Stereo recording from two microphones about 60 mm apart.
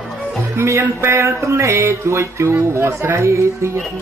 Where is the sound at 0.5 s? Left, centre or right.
Right.